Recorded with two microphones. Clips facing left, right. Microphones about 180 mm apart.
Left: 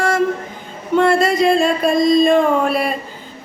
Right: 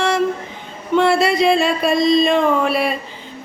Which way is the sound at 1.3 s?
Centre (ahead or behind).